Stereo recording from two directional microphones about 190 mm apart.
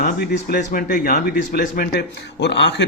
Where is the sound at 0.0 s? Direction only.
55° left (ahead or behind).